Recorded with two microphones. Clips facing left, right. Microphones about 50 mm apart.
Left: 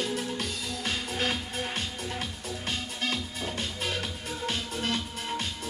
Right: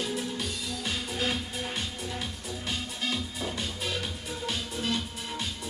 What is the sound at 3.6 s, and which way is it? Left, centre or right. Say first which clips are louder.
Music: left 3 dB; left.